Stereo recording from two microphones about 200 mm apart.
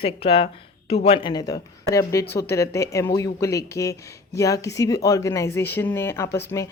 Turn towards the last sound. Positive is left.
turn(degrees=15)  # may be behind; listen again after turning